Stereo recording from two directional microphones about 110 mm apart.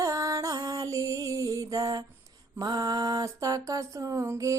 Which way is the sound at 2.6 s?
35° right (ahead or behind).